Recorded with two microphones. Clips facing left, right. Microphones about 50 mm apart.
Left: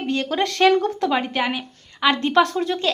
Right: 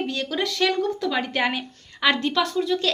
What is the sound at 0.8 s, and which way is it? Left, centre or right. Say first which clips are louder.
Speech: left 2 dB; left.